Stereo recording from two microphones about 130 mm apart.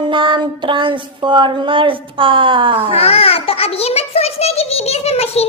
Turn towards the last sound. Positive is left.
turn(degrees=50)  # may be behind; listen again after turning